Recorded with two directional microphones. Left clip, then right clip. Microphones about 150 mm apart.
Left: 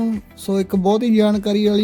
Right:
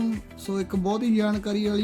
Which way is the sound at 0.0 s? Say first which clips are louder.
Left 6 dB; 50° left (ahead or behind).